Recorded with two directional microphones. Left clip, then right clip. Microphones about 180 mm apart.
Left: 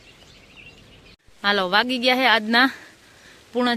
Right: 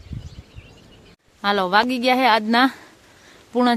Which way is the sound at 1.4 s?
10° right (ahead or behind).